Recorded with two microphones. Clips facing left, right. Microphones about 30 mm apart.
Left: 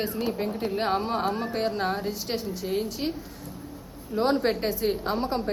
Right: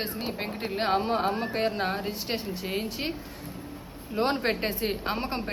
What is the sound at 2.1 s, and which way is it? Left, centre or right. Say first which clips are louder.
A woman's voice: left 1 dB; right.